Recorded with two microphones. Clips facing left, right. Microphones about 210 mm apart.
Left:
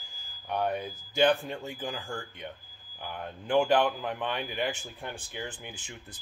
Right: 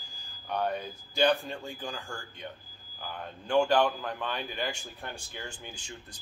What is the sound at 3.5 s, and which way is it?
Speech, 20° left (ahead or behind).